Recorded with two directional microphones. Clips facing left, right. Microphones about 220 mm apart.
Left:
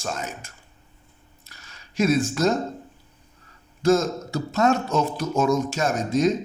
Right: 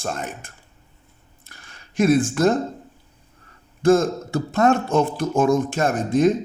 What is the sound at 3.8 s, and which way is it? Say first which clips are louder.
Speech: right 3 dB; 55° right (ahead or behind).